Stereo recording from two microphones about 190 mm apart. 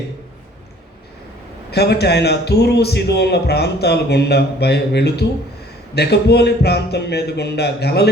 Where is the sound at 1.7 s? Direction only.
60° left (ahead or behind).